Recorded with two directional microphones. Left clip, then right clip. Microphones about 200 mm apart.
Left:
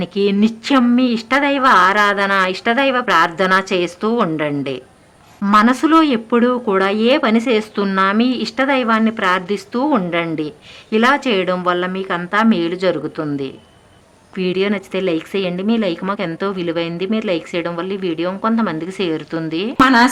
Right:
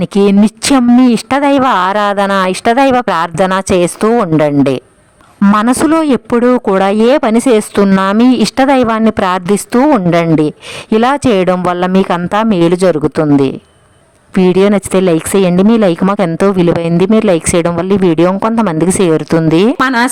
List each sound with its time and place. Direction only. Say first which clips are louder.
0.0 s speech: right 7 dB; 55° right (ahead or behind)
5.4 s speech: right 3 dB; 40° right (ahead or behind); by 13.0 s 55° right (ahead or behind)
14.3 s speech: right 10 dB; 55° right (ahead or behind)
19.8 s speech: even; 40° right (ahead or behind)